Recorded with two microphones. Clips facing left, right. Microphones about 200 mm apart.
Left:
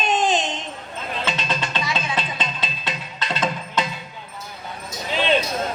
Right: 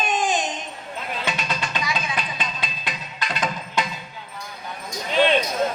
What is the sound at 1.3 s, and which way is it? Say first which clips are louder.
Music: left 2 dB; 25° left (ahead or behind).